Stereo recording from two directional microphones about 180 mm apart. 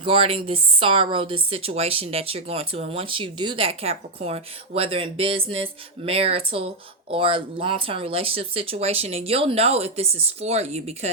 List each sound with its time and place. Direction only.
0.0 s speech: 30° right (ahead or behind)